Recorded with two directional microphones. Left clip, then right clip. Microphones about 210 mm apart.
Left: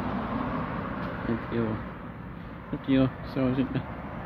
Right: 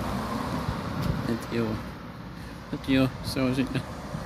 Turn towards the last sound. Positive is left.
turn(degrees=-10)  # may be behind; listen again after turning